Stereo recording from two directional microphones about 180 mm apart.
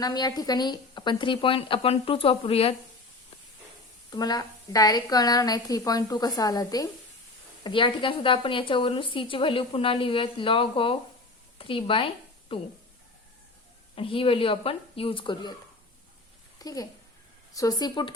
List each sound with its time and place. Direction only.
0.0 s a woman's voice: 20° left (ahead or behind)
4.1 s a woman's voice: 20° left (ahead or behind)
11.5 s a sound: 30° left (ahead or behind)
13.9 s a woman's voice: 30° left (ahead or behind)
16.6 s a child's voice: 20° left (ahead or behind)